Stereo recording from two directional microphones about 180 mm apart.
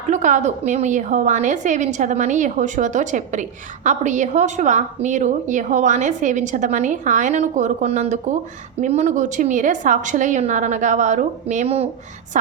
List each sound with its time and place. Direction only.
0.1 s a woman's voice: 40° right (ahead or behind)